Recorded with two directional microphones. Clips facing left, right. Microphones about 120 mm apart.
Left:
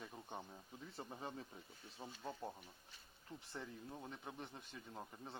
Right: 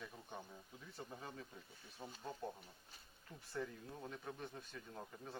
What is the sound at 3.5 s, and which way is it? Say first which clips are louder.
A man's voice: right 5 dB; 20° left (ahead or behind).